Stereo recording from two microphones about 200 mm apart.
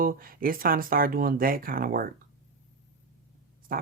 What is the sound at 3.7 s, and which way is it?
Speech, 45° right (ahead or behind).